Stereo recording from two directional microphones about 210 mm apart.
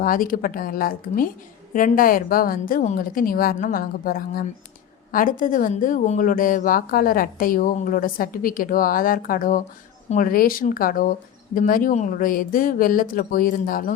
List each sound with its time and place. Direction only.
0.0 s a woman's voice: 40° left (ahead or behind)